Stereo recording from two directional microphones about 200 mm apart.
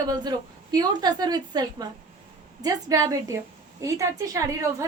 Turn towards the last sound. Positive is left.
turn(degrees=-15)  # may be behind; listen again after turning